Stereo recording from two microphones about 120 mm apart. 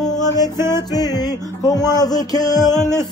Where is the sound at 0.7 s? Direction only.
35° left (ahead or behind).